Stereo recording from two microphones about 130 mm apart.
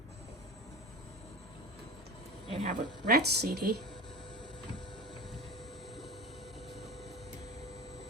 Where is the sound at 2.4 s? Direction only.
55° right (ahead or behind).